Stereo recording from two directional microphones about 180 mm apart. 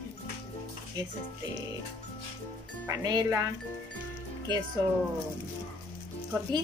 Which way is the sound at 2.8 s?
20° right (ahead or behind).